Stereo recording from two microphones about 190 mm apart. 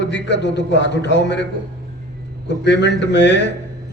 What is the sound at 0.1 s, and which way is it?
A man's voice, 65° left (ahead or behind).